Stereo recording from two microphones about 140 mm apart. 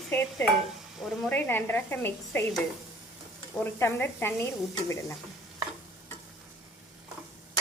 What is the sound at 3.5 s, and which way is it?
Speech, 15° left (ahead or behind).